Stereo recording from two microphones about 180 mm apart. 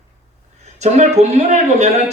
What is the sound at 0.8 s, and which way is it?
Speech, 40° right (ahead or behind).